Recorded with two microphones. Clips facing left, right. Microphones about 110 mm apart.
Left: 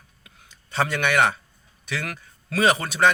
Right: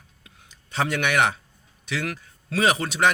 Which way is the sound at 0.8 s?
15° right (ahead or behind).